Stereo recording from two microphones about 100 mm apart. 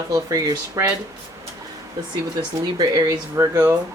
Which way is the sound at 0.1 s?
35° right (ahead or behind).